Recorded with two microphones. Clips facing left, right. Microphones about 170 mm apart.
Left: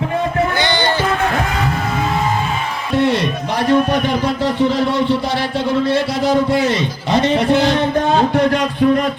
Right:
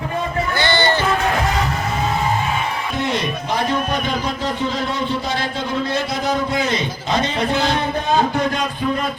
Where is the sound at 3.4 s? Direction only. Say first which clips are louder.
Left 8 dB; 70° left (ahead or behind).